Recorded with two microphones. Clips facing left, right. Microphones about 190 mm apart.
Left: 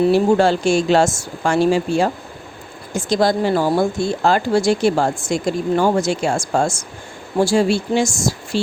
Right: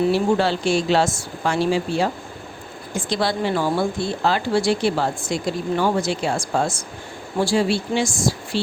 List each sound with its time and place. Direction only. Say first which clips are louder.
0.1 s speech: left 5 dB; 45° left (ahead or behind)